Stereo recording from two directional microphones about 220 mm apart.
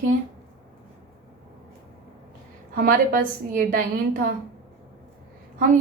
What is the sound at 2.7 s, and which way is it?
A woman's voice, 40° right (ahead or behind).